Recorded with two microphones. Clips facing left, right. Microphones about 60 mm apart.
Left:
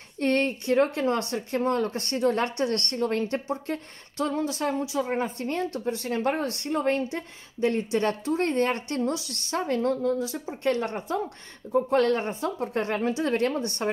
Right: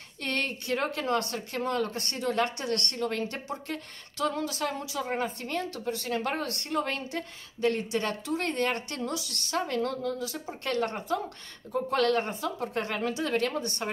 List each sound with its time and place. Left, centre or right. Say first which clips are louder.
0.2 s a woman's voice: left 7 dB; left
11.9 s a woman's voice: left 1 dB; left